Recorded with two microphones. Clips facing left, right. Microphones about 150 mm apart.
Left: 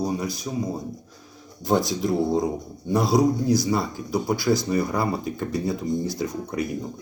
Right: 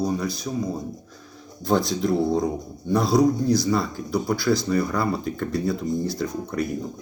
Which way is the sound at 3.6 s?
20° left (ahead or behind).